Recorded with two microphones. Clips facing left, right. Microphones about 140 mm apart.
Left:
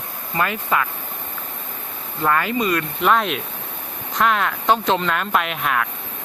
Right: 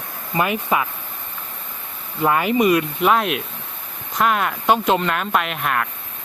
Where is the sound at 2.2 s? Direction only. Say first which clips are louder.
Right 3 dB; 15° right (ahead or behind).